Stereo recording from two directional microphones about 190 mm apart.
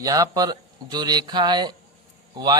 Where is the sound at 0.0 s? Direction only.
20° right (ahead or behind).